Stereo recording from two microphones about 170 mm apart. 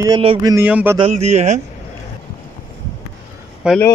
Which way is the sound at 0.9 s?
35° right (ahead or behind).